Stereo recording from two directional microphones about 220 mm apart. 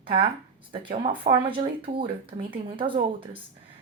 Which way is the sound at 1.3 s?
25° right (ahead or behind).